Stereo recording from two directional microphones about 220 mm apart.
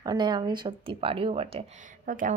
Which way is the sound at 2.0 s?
40° right (ahead or behind).